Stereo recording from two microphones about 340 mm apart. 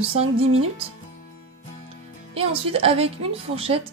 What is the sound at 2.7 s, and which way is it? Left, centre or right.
A woman's voice, centre.